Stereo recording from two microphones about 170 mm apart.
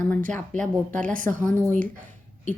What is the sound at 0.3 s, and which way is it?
Speech, 10° left (ahead or behind).